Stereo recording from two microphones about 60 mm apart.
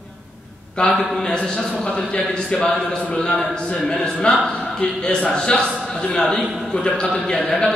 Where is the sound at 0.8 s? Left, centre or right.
Centre.